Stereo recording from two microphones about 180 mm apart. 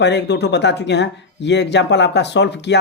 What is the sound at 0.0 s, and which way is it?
Speech, 75° left (ahead or behind).